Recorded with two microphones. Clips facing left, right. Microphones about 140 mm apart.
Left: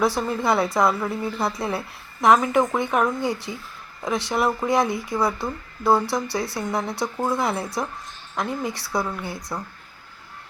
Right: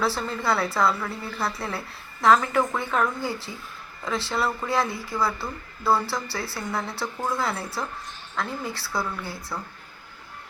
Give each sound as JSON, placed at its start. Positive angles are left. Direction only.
{"t": 0.0, "sound": "a woman's voice", "side_deg": 15}